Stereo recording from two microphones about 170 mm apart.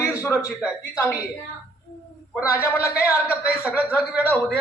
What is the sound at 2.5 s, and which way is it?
Speech, 15° left (ahead or behind).